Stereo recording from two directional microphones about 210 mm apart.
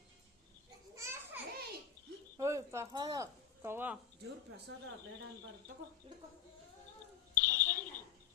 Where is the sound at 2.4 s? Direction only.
15° right (ahead or behind).